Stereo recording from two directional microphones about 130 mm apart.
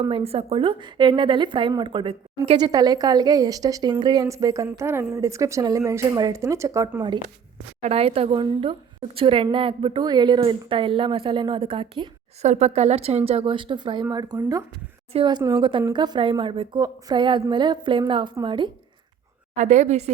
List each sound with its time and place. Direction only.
0.1 s a woman's voice: 50° right (ahead or behind); by 6.9 s 25° right (ahead or behind)
7.8 s a woman's voice: 50° right (ahead or behind)
12.4 s a woman's voice: 60° right (ahead or behind); by 18.7 s 40° right (ahead or behind)
19.5 s a woman's voice: 60° right (ahead or behind)